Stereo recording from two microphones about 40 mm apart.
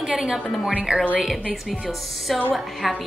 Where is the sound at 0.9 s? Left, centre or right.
Right.